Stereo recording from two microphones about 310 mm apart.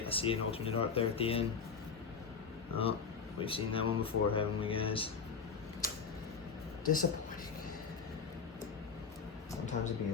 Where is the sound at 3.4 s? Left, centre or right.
Centre.